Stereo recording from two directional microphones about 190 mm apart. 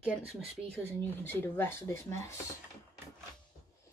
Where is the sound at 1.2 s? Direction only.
10° left (ahead or behind).